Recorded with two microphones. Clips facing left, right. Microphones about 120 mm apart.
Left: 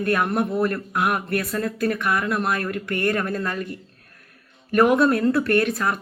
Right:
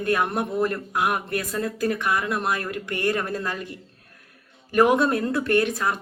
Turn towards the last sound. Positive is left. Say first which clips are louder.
# left 1 dB
turn(degrees=-25)  # may be behind; listen again after turning